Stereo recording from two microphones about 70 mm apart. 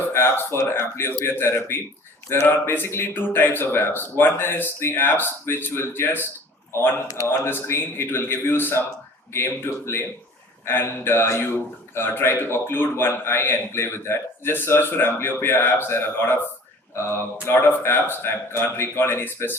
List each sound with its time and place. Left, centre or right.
0.1 s a man's voice: left
7.3 s a man's voice: left
17.4 s a man's voice: left